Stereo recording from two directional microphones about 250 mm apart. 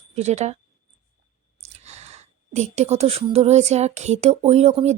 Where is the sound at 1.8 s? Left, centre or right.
Right.